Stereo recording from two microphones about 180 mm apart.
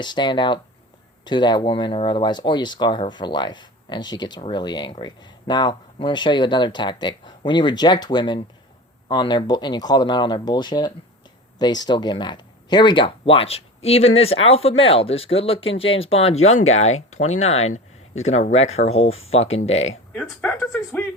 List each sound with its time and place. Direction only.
0.0 s speech: 25° left (ahead or behind)
20.4 s speech: 10° left (ahead or behind)